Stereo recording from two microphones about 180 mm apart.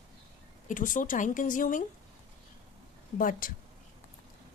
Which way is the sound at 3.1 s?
50° left (ahead or behind).